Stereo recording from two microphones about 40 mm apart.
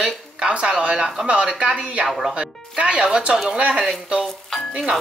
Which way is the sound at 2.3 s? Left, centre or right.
Right.